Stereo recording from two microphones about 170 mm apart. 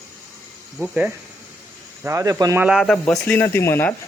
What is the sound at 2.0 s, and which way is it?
Speech, 20° right (ahead or behind).